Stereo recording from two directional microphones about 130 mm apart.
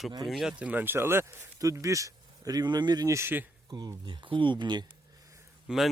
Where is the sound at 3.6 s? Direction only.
30° right (ahead or behind).